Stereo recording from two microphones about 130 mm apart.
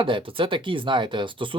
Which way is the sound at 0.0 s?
40° right (ahead or behind).